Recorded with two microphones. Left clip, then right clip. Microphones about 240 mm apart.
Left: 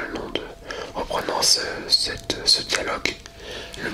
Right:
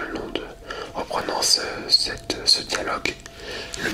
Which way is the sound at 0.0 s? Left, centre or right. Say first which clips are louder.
Even; centre.